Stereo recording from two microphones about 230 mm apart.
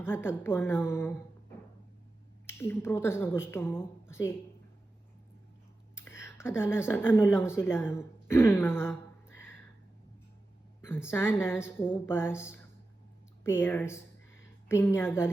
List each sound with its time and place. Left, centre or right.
0.0 s speech: centre
2.5 s speech: centre
6.1 s a sound: centre
6.6 s a woman's voice: centre
10.8 s a sound: centre
11.1 s speech: centre